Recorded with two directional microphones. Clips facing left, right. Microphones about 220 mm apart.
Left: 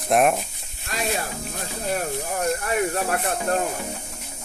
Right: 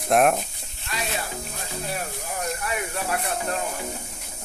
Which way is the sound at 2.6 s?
45° left (ahead or behind).